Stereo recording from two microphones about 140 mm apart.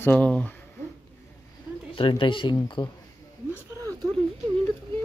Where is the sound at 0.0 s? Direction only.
10° left (ahead or behind).